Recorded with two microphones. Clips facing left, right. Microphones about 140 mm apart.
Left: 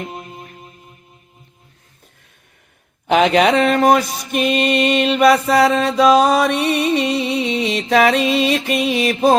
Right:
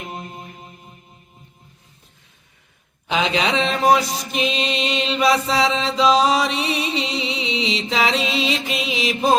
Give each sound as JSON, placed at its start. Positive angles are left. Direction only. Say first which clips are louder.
{"t": 3.1, "sound": "mantra", "louder": "left 8 dB", "side_deg": 60}